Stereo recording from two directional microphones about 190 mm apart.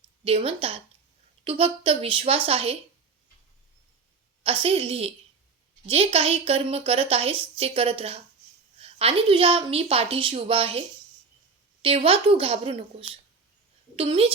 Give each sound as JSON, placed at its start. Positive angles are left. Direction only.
{"t": 0.3, "sound": "a woman's voice", "side_deg": -30}
{"t": 4.4, "sound": "a woman's voice", "side_deg": -30}